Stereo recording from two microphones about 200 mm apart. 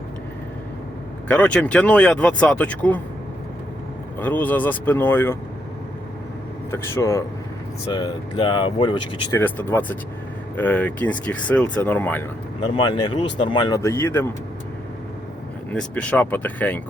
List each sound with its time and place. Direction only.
1.3 s speech: 5° left (ahead or behind)
4.2 s speech: 10° left (ahead or behind)
6.7 s speech: 10° left (ahead or behind)
9.3 s speech: 10° left (ahead or behind)
12.6 s speech: 25° left (ahead or behind)
15.7 s speech: 5° left (ahead or behind)